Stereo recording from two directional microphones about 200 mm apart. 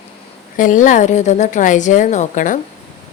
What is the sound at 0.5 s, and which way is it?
A woman's voice, 40° left (ahead or behind).